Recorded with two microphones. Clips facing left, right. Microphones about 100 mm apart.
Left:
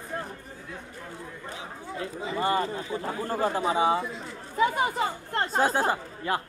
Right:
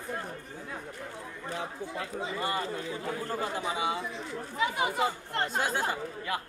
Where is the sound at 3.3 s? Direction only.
40° left (ahead or behind).